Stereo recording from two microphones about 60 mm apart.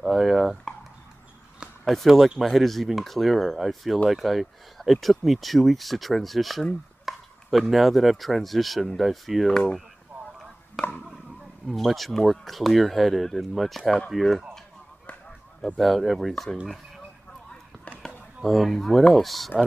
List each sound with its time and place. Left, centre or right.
0.0 s speech: centre
1.9 s speech: centre
9.5 s speech: centre
10.8 s speech: centre
15.8 s speech: centre
18.0 s speech: centre